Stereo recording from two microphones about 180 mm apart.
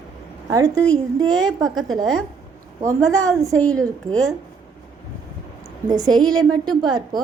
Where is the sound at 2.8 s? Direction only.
20° right (ahead or behind).